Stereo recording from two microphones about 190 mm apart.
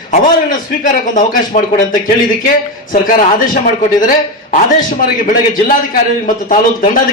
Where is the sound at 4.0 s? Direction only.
45° left (ahead or behind).